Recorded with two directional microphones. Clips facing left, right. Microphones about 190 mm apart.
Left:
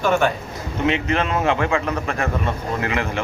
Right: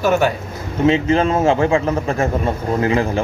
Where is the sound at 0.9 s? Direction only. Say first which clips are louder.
Right 6 dB; 30° right (ahead or behind).